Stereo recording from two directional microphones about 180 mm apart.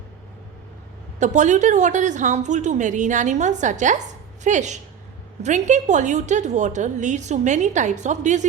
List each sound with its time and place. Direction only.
1.2 s a woman's voice: 40° right (ahead or behind)